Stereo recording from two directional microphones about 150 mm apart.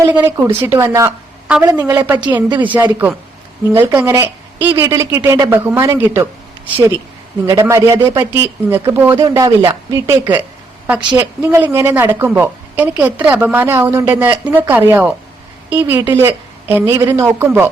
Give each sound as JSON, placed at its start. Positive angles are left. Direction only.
{"t": 0.1, "sound": "a woman's voice", "side_deg": -15}
{"t": 2.1, "sound": "speech", "side_deg": -30}
{"t": 2.6, "sound": "a woman's voice", "side_deg": -10}
{"t": 7.4, "sound": "speech", "side_deg": -20}
{"t": 10.8, "sound": "a woman's voice", "side_deg": -10}